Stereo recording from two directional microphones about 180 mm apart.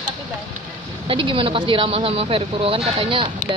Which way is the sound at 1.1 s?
30° right (ahead or behind).